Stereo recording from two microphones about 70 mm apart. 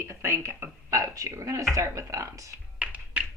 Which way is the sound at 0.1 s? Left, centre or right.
Right.